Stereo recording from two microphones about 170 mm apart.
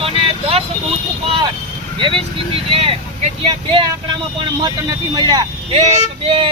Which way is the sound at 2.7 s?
30° right (ahead or behind).